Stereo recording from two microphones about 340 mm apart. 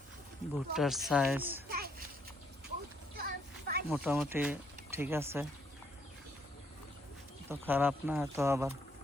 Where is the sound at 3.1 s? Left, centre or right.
Right.